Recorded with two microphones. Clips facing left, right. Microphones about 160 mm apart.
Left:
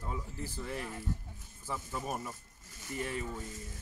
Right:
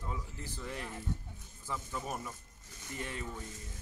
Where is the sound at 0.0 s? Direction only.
10° left (ahead or behind).